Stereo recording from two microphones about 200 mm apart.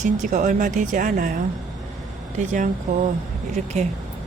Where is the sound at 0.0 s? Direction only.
40° right (ahead or behind).